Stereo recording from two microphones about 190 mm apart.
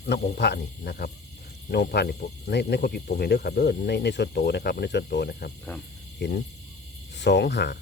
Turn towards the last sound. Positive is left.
turn(degrees=60)  # may be behind; listen again after turning